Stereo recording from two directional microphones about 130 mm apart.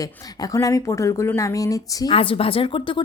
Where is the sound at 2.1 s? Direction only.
45° left (ahead or behind).